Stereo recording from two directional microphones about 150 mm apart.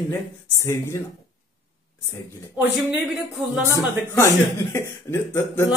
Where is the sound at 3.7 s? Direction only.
20° left (ahead or behind).